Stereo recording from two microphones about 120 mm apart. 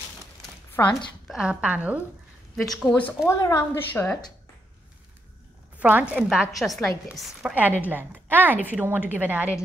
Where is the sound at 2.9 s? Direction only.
20° left (ahead or behind).